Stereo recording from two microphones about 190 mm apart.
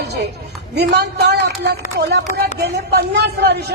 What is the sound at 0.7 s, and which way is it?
A woman's voice, 60° right (ahead or behind).